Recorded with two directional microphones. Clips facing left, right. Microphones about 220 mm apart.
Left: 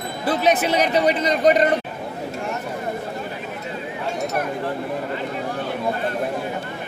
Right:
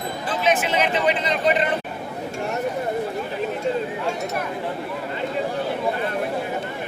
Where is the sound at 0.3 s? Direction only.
40° left (ahead or behind).